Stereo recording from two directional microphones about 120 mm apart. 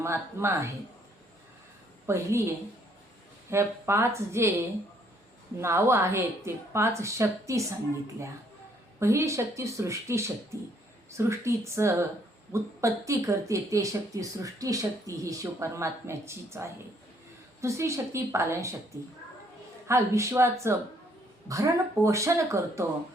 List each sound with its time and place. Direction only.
0.0 s speech: 20° right (ahead or behind)
2.1 s speech: 20° right (ahead or behind)
3.5 s speech: 20° right (ahead or behind)
5.5 s speech: 20° right (ahead or behind)
9.0 s speech: 25° right (ahead or behind)
19.9 s speech: 25° right (ahead or behind)